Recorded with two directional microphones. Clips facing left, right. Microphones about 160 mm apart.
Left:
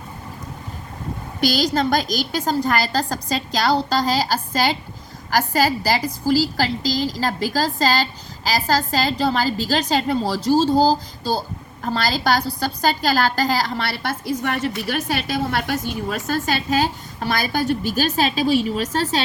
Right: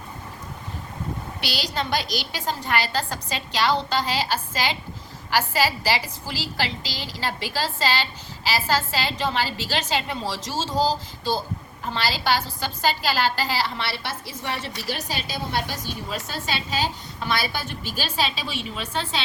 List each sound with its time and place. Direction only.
1.4 s a woman's voice: 40° left (ahead or behind)